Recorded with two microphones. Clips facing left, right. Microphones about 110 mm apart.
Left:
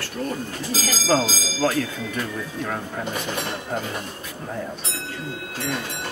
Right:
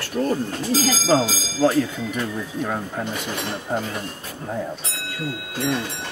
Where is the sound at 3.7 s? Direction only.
20° right (ahead or behind).